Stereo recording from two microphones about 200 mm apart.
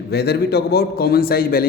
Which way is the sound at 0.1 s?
55° left (ahead or behind).